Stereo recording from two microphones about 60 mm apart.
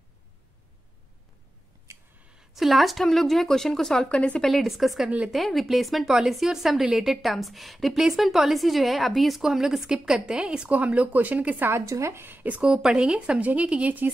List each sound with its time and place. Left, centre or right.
2.5 s a woman's voice: centre; by 11.7 s right
11.7 s speech: right